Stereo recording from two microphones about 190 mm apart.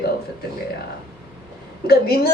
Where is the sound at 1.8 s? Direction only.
55° left (ahead or behind).